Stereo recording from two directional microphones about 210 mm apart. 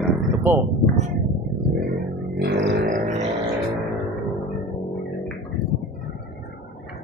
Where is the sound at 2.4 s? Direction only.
55° right (ahead or behind).